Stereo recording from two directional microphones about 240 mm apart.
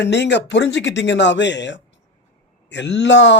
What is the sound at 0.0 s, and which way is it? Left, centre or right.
Speech, left.